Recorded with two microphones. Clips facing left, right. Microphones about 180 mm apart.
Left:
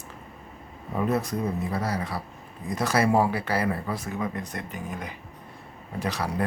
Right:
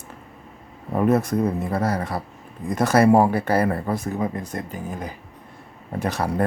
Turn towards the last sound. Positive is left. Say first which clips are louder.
# right 5 dB
turn(degrees=-50)  # may be behind; listen again after turning